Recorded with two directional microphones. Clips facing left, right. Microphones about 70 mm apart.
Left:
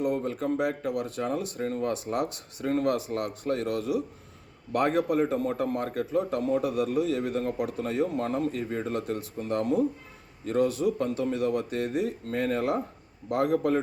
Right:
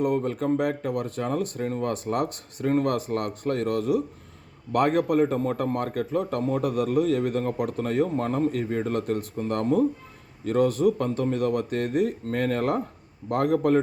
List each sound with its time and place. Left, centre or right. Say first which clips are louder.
0.0 s speech: right 3 dB; right